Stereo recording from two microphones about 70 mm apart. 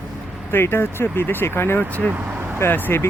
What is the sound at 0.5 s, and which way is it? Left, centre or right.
Speech, left.